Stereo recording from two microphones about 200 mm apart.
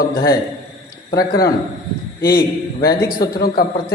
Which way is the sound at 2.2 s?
50° left (ahead or behind).